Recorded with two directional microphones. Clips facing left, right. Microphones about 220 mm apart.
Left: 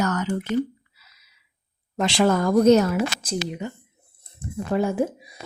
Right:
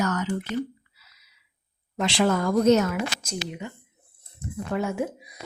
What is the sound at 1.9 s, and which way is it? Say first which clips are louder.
A woman's voice: left 3 dB; 45° left (ahead or behind).